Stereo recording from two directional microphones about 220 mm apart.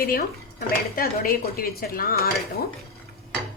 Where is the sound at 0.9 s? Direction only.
40° left (ahead or behind).